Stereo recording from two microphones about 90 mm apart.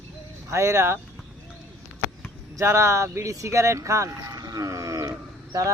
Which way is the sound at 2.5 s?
35° right (ahead or behind).